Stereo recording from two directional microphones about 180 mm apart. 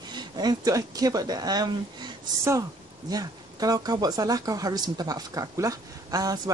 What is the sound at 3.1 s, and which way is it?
Speech, 20° right (ahead or behind).